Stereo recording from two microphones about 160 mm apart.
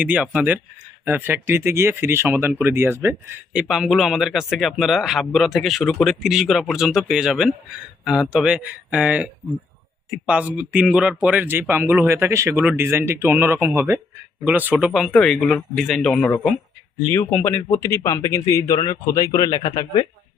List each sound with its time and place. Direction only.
0.0 s speech: 10° right (ahead or behind)
17.1 s speech: 15° left (ahead or behind)